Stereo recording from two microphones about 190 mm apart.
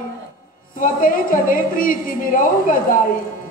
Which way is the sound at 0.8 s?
45° left (ahead or behind).